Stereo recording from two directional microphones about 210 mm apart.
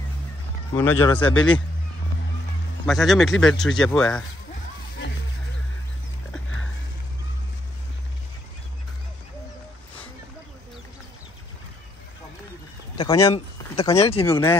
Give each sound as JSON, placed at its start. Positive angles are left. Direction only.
{"t": 0.7, "sound": "a man's voice", "side_deg": 10}
{"t": 2.9, "sound": "speech", "side_deg": 0}
{"t": 12.9, "sound": "a man's voice", "side_deg": 20}